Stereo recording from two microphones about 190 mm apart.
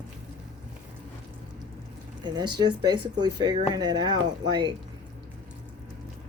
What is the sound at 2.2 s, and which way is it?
Speech, 20° right (ahead or behind).